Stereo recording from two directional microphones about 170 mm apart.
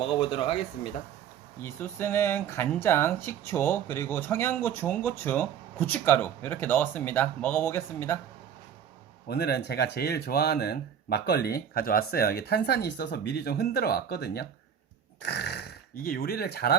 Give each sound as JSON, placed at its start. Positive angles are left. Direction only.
{"t": 0.0, "sound": "speech", "side_deg": 30}
{"t": 1.6, "sound": "speech", "side_deg": 15}
{"t": 9.3, "sound": "speech", "side_deg": 70}